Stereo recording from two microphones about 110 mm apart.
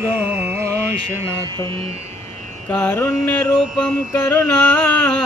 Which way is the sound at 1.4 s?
50° right (ahead or behind).